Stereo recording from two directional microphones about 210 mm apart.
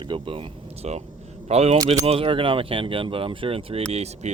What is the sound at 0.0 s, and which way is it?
Speech, 25° right (ahead or behind).